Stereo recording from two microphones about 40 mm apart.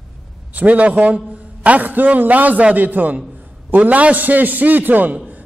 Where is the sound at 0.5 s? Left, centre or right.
Right.